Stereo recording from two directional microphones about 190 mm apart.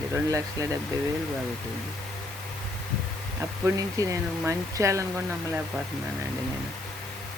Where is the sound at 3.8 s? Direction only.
15° right (ahead or behind).